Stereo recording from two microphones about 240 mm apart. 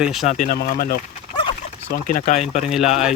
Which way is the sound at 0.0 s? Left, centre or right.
Centre.